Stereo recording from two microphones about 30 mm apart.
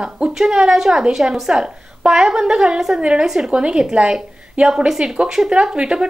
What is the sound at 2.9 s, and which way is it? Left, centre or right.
Speech, right.